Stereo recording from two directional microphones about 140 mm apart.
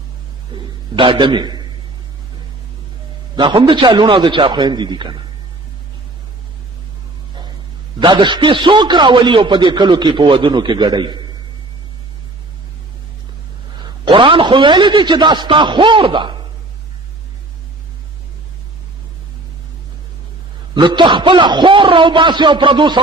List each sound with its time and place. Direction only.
0.5 s a man's voice: 35° right (ahead or behind)
3.3 s a man's voice: 35° right (ahead or behind)
7.9 s a man's voice: 35° right (ahead or behind)
14.0 s a man's voice: 35° right (ahead or behind)
20.7 s a man's voice: 35° right (ahead or behind)